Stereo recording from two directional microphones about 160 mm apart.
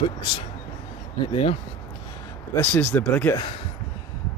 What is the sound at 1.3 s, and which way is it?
Speech, 35° left (ahead or behind).